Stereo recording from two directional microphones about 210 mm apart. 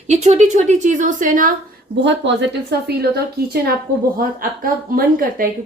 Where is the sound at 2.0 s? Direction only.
55° right (ahead or behind).